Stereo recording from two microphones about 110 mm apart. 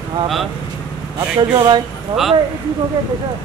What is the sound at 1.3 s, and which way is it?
Speech, 45° right (ahead or behind).